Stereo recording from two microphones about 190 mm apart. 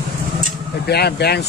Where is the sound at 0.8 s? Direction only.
60° left (ahead or behind).